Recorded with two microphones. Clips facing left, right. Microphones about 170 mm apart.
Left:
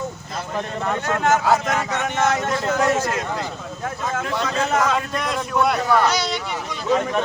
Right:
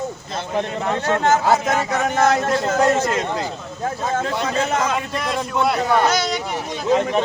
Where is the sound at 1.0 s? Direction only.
30° right (ahead or behind).